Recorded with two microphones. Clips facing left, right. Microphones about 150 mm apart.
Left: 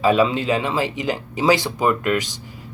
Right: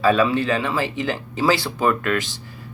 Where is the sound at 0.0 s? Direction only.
15° left (ahead or behind).